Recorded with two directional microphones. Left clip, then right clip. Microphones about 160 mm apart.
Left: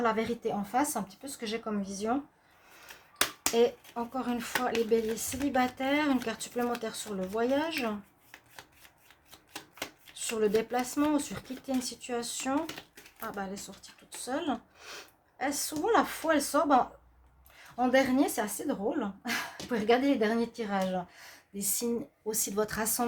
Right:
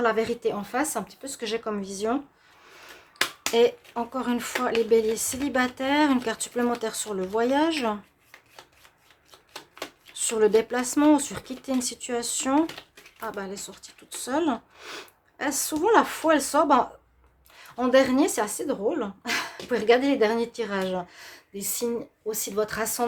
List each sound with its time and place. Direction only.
0.0 s speech: 30° right (ahead or behind)
3.5 s speech: 30° right (ahead or behind)
10.2 s speech: 30° right (ahead or behind)
22.3 s a woman's voice: 10° right (ahead or behind)